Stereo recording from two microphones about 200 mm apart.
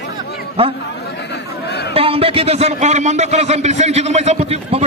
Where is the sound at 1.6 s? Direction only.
55° left (ahead or behind).